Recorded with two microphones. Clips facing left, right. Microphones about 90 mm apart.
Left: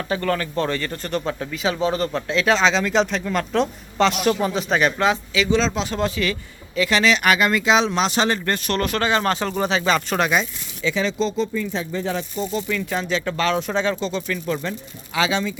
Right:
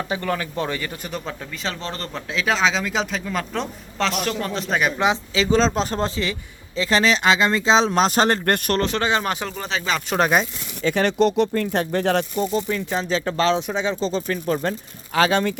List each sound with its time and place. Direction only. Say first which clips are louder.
0.1 s a man's voice: left 2 dB; 15° right (ahead or behind)
5.3 s speech: right 1 dB; 35° right (ahead or behind); by 8.7 s 55° right (ahead or behind)
8.8 s speech: left 1 dB; 20° right (ahead or behind)
9.6 s a man's voice: left 4 dB; centre (ahead or behind)
10.2 s speech: right 2 dB; 40° right (ahead or behind)
10.8 s speech: right 4 dB; 60° right (ahead or behind)
12.5 s speech: right 1 dB; 35° right (ahead or behind)
13.6 s speech: left 2 dB; 15° right (ahead or behind)
14.0 s speech: right 2 dB; 35° right (ahead or behind); by 15.5 s 50° right (ahead or behind)